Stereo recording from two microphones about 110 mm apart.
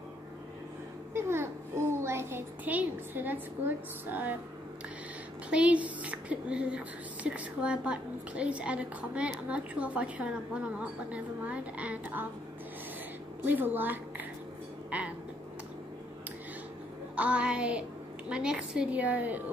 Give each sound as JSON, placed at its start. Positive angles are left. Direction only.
{"t": 1.1, "sound": "a child's voice", "side_deg": -25}
{"t": 5.5, "sound": "a woman's voice", "side_deg": -10}
{"t": 13.5, "sound": "a woman's voice", "side_deg": -15}
{"t": 14.9, "sound": "a sound", "side_deg": -15}
{"t": 17.1, "sound": "a sound", "side_deg": -10}
{"t": 18.3, "sound": "a woman's voice", "side_deg": -10}